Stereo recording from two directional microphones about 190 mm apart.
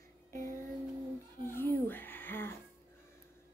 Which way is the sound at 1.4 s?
10° left (ahead or behind).